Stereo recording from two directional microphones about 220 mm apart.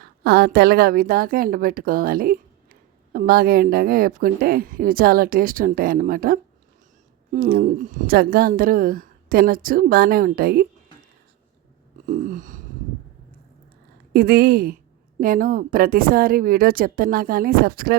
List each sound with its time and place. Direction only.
0.0 s a woman's voice: 45° right (ahead or behind)
12.0 s a woman's voice: 35° right (ahead or behind)
14.1 s a woman's voice: 45° right (ahead or behind)